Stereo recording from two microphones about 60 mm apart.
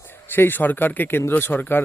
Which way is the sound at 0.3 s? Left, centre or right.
Left.